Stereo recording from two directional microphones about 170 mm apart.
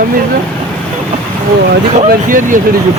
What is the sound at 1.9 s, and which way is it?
Speech, 55° right (ahead or behind).